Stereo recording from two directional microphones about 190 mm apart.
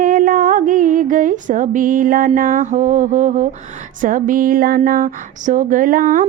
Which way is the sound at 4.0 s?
45° right (ahead or behind).